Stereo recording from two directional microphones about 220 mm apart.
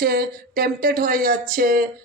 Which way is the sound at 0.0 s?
45° right (ahead or behind).